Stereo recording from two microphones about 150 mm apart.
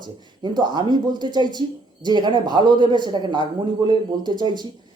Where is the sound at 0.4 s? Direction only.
30° right (ahead or behind).